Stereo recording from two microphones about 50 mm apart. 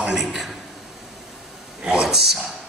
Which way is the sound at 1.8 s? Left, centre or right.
Centre.